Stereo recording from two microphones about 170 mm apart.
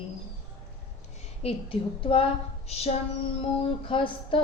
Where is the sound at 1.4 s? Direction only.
30° left (ahead or behind).